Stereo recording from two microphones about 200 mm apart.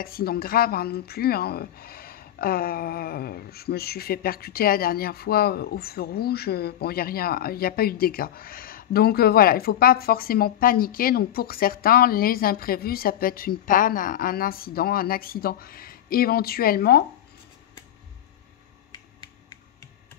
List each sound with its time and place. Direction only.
0.0 s speech: 50° left (ahead or behind)